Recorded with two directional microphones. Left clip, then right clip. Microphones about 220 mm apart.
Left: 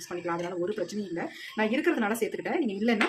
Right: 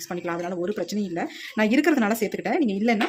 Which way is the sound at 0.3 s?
40° right (ahead or behind).